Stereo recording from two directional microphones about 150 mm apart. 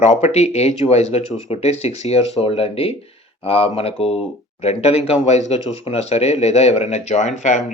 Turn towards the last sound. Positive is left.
turn(degrees=55)  # may be behind; listen again after turning